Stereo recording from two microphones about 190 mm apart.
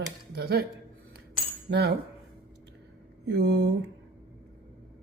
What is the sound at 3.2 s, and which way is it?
Speech, 65° right (ahead or behind).